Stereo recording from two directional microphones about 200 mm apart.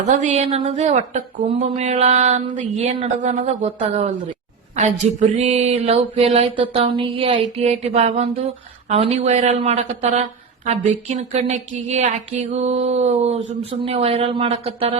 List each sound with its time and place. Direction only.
0.1 s speech: 35° right (ahead or behind)
4.8 s mantra: 35° right (ahead or behind)
7.2 s speech: 25° right (ahead or behind)
13.7 s mantra: 30° right (ahead or behind)